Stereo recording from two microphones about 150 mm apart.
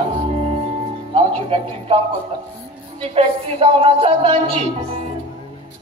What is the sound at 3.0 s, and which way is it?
A man's voice, 40° right (ahead or behind).